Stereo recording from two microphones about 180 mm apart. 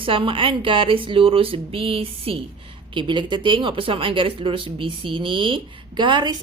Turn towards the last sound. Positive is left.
turn(degrees=-25)  # may be behind; listen again after turning